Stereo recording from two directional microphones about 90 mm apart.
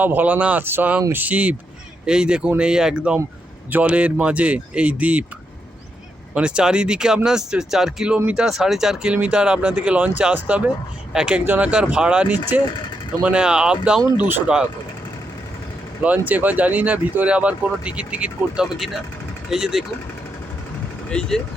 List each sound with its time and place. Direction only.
0.0 s speech: 20° right (ahead or behind)
6.3 s speech: 10° right (ahead or behind)
14.2 s speech: 20° right (ahead or behind)
14.4 s speech: 10° right (ahead or behind)
16.0 s speech: 20° right (ahead or behind)
21.1 s speech: 10° left (ahead or behind)